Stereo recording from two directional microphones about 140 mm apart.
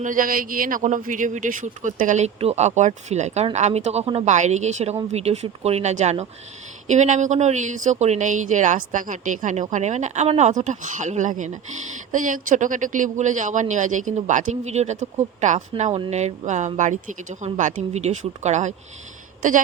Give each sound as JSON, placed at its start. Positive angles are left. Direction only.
{"t": 0.0, "sound": "a woman's voice", "side_deg": -75}